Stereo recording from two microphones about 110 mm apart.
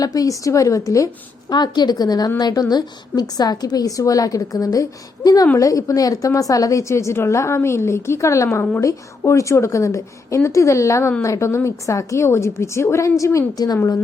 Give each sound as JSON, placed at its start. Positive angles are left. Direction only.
{"t": 0.0, "sound": "a woman's voice", "side_deg": 35}